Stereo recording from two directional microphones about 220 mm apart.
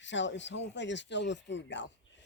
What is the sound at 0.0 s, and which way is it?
Speech, 55° left (ahead or behind).